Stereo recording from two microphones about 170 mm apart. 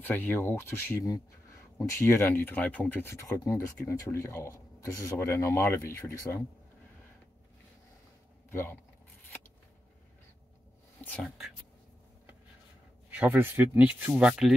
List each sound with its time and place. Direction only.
0.0 s speech: 10° left (ahead or behind)
8.5 s speech: 15° left (ahead or behind)
11.1 s speech: 5° left (ahead or behind)
13.1 s speech: 10° right (ahead or behind)